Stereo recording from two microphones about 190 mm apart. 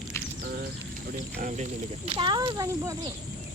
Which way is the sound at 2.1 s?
25° right (ahead or behind).